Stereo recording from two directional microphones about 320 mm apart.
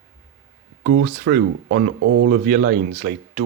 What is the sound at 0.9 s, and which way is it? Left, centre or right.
Speech, right.